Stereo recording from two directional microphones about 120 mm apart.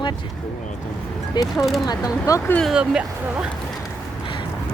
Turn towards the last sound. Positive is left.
turn(degrees=-5)  # may be behind; listen again after turning